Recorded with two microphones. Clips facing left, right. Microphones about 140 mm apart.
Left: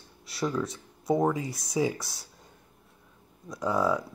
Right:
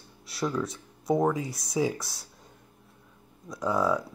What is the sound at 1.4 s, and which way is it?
Speech, 45° left (ahead or behind).